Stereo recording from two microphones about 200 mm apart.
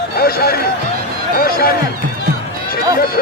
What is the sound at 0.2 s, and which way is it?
Speech, 50° left (ahead or behind).